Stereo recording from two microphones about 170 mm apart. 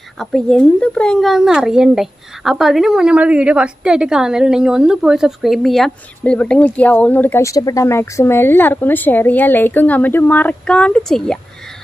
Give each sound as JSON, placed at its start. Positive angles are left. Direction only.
{"t": 0.2, "sound": "speech", "side_deg": 5}